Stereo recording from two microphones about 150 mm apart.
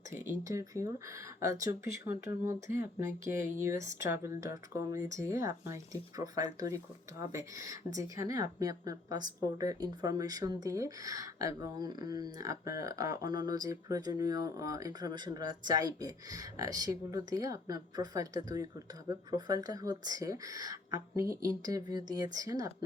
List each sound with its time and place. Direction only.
0.1 s a woman's voice: 20° right (ahead or behind)